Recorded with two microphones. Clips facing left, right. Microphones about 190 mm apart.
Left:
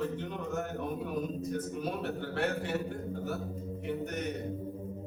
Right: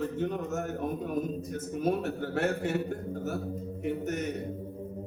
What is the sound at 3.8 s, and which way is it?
Speech, 45° right (ahead or behind).